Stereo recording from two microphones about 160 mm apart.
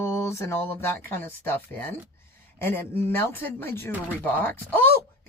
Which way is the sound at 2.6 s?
15° left (ahead or behind).